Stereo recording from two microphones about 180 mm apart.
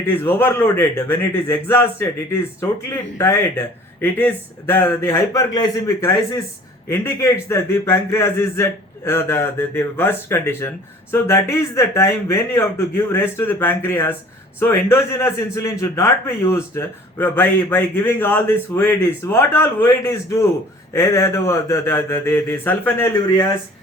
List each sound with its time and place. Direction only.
0.1 s a man's voice: 10° left (ahead or behind)